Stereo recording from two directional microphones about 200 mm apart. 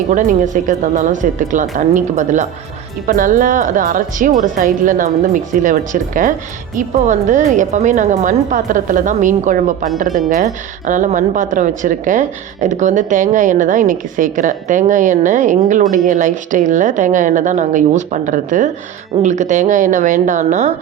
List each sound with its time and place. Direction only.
0.1 s a woman's voice: 40° right (ahead or behind)